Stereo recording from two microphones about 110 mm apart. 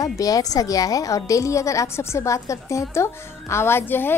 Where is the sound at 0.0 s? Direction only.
35° left (ahead or behind).